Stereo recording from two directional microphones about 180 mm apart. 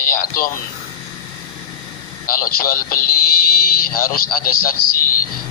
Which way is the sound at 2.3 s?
50° left (ahead or behind).